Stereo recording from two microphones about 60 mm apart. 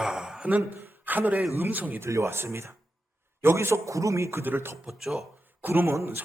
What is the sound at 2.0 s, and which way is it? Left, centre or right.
A man's voice, right.